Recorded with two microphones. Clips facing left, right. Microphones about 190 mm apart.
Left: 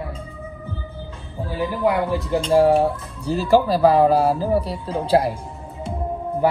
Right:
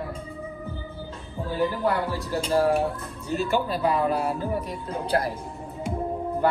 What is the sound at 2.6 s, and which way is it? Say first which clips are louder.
Speech: left 6 dB; 30° left (ahead or behind).